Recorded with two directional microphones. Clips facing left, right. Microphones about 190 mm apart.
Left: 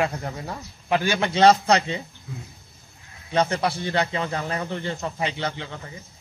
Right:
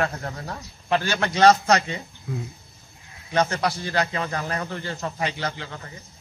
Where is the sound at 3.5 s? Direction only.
25° left (ahead or behind).